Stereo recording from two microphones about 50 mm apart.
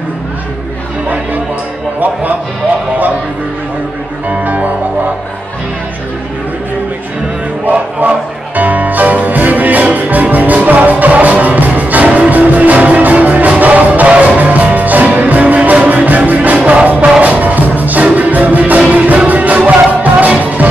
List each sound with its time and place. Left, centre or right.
1.0 s music: right
4.3 s music: right
7.6 s music: right